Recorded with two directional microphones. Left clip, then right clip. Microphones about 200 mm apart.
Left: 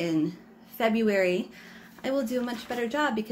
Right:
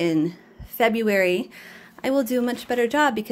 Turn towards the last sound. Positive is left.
turn(degrees=-50)  # may be behind; listen again after turning